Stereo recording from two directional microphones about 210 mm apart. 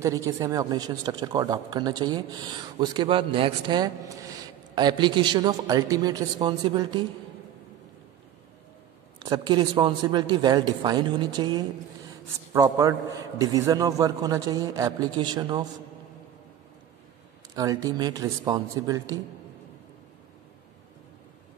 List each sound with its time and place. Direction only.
0.0 s speech: 15° right (ahead or behind)
9.2 s a man's voice: 20° right (ahead or behind)
17.6 s a man's voice: 15° right (ahead or behind)